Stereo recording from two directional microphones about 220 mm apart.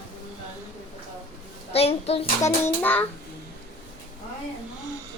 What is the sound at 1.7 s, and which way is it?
Speech, 30° left (ahead or behind).